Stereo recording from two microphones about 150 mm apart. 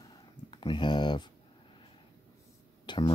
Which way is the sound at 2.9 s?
30° left (ahead or behind).